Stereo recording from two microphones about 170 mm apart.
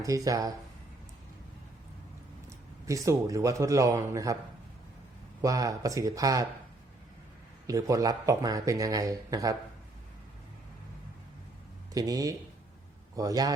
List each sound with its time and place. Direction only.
0.0 s speech: 20° right (ahead or behind)
2.8 s speech: 20° right (ahead or behind)
5.4 s speech: 20° right (ahead or behind)
7.7 s speech: 20° right (ahead or behind)
11.9 s speech: 20° right (ahead or behind)